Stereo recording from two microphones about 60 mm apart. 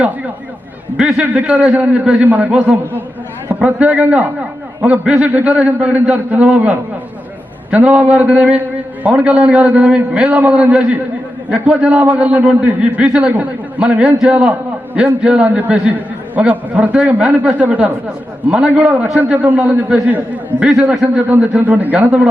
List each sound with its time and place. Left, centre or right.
0.9 s a man's voice: centre
1.2 s a man's voice: right
18.4 s a man's voice: centre
20.7 s a man's voice: centre
21.2 s a man's voice: right